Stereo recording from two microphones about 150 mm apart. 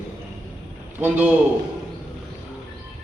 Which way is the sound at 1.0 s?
10° right (ahead or behind).